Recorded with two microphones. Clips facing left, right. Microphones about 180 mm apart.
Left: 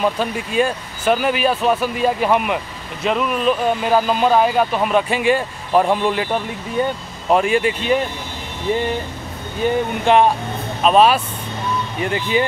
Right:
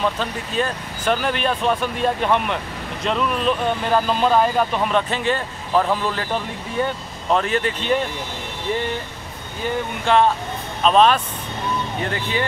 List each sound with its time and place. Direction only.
0.0 s speech: 10° left (ahead or behind)
9.6 s speech: 20° left (ahead or behind)